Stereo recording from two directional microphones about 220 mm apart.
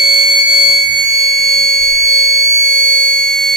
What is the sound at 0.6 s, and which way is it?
Music, centre (ahead or behind).